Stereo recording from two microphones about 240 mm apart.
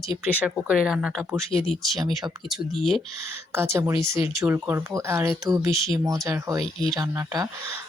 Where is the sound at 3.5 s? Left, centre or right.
Centre.